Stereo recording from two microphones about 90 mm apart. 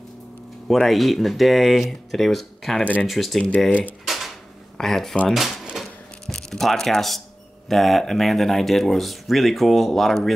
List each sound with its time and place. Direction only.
0.7 s speech: centre (ahead or behind)
2.8 s speech: 15° left (ahead or behind)
3.1 s speech: centre (ahead or behind)
4.0 s drawer open or close: centre (ahead or behind)
4.7 s speech: 5° left (ahead or behind)
5.3 s a sound: centre (ahead or behind)
7.6 s speech: centre (ahead or behind)